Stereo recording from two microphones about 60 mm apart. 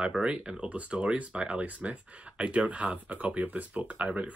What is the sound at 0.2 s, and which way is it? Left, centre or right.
Speech, centre.